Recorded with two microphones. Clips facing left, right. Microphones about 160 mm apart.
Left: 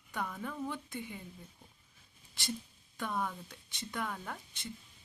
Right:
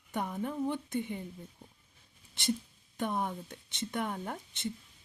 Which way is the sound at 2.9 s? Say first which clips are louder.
Right 3 dB; 20° right (ahead or behind).